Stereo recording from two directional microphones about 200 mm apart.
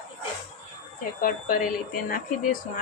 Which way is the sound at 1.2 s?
45° left (ahead or behind).